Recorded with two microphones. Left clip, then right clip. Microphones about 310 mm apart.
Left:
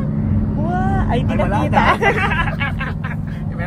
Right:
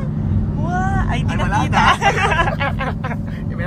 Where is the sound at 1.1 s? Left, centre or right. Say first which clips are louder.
Left 3 dB; right.